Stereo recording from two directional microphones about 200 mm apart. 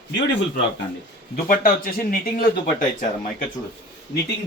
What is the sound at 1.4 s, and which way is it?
Speech, 45° left (ahead or behind).